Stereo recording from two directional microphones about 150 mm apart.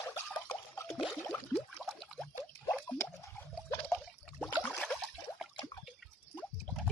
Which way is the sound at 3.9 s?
10° left (ahead or behind).